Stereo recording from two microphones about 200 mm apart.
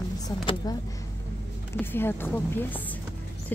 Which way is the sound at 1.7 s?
10° left (ahead or behind).